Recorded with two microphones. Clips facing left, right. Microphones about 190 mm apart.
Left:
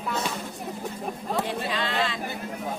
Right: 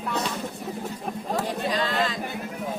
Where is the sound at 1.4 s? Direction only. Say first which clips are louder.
Right 3 dB; 40° right (ahead or behind).